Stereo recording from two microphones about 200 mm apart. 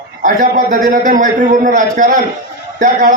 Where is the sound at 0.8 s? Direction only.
40° right (ahead or behind).